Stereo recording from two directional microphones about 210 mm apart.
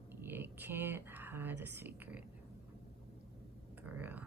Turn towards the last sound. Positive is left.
turn(degrees=-10)  # may be behind; listen again after turning